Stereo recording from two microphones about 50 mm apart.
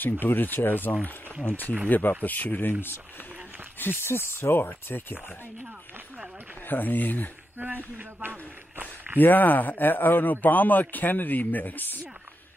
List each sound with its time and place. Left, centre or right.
0.0 s speech: left
3.7 s speech: left
6.7 s speech: left
7.5 s speech: right
8.7 s a sound: right
9.2 s speech: left